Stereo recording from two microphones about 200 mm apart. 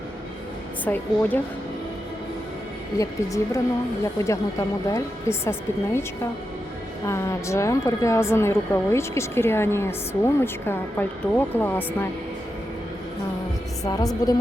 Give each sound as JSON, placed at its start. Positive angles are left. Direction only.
{"t": 0.9, "sound": "a woman's voice", "side_deg": 10}
{"t": 3.0, "sound": "a woman's voice", "side_deg": 15}
{"t": 13.8, "sound": "a woman's voice", "side_deg": 20}